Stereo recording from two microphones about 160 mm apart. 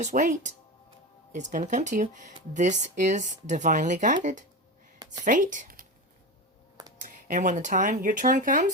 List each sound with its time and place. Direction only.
0.0 s speech: 50° right (ahead or behind)
7.0 s speech: 55° right (ahead or behind)